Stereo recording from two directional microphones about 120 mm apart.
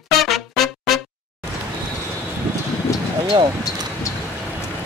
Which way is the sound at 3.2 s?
45° right (ahead or behind).